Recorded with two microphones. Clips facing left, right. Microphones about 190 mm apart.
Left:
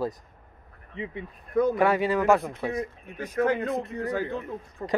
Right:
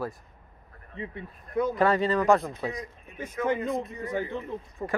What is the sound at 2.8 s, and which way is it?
Speech, 70° left (ahead or behind).